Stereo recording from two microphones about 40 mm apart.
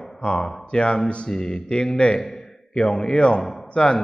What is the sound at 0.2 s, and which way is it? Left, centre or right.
A man's voice, left.